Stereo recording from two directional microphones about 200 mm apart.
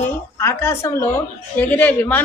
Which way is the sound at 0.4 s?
15° left (ahead or behind).